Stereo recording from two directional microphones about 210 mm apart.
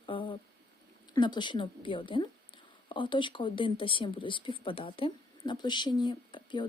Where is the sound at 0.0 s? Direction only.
25° left (ahead or behind).